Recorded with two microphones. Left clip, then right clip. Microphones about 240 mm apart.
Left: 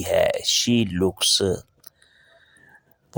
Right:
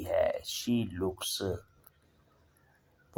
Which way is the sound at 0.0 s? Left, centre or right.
Left.